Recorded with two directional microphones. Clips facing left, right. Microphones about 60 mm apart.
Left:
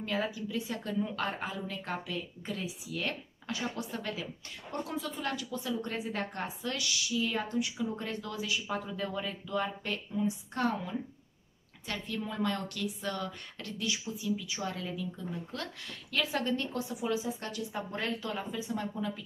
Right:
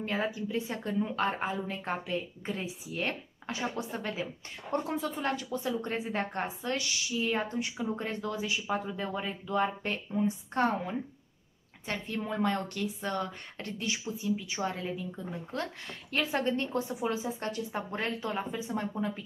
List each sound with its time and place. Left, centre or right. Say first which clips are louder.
0.0 s a woman's voice: right 1 dB; right